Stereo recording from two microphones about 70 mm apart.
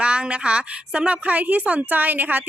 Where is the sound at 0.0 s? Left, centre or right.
Centre.